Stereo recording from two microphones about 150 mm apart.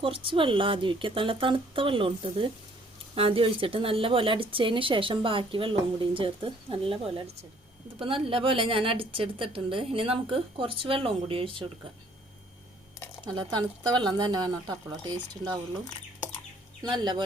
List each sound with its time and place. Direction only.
0.0 s speech: 35° right (ahead or behind)
13.2 s speech: 30° right (ahead or behind)
16.8 s speech: 30° right (ahead or behind)